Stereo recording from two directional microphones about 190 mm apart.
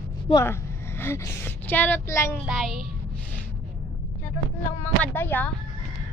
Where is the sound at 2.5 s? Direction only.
Centre (ahead or behind).